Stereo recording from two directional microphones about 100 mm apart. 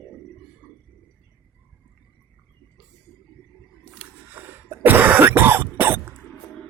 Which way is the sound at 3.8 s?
15° right (ahead or behind).